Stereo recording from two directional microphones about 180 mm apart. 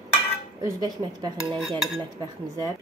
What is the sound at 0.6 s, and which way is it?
A woman's voice, 20° right (ahead or behind).